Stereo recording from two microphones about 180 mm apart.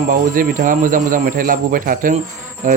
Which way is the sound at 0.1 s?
50° right (ahead or behind).